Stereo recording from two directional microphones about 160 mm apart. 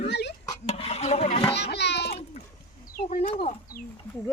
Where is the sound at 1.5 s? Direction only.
90° left.